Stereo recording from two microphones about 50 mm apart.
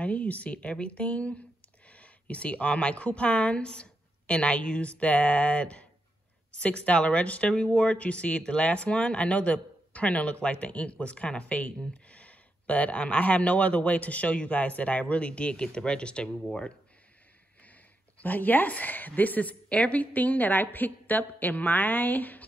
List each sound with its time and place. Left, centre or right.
0.0 s speech: left
18.2 s a woman's voice: left